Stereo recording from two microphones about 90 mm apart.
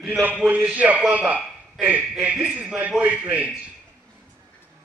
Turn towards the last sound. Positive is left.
turn(degrees=-15)  # may be behind; listen again after turning